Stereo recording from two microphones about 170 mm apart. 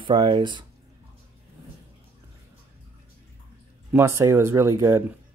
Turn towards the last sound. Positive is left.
turn(degrees=-15)  # may be behind; listen again after turning